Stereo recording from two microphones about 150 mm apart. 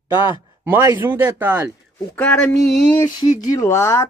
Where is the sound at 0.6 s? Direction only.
15° right (ahead or behind).